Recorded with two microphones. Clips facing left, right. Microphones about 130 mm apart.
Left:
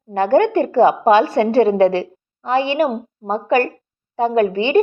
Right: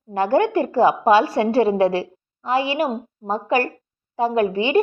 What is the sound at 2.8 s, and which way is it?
Speech, 60° left (ahead or behind).